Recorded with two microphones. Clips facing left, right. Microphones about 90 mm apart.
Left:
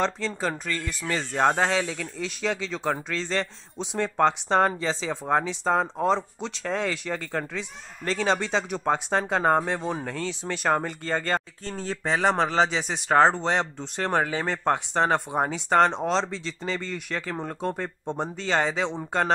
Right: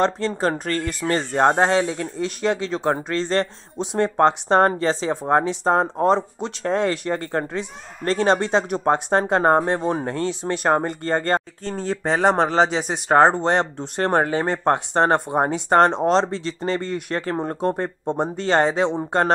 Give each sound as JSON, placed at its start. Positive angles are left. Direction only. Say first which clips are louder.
{"t": 0.4, "sound": "speech", "louder": "right 7 dB", "side_deg": -55}